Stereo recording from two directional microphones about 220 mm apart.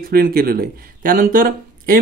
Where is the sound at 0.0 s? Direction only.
45° right (ahead or behind).